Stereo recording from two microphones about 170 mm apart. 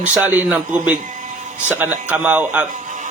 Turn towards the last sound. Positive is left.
turn(degrees=-50)  # may be behind; listen again after turning